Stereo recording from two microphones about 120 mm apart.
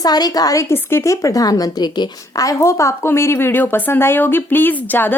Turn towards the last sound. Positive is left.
turn(degrees=15)  # may be behind; listen again after turning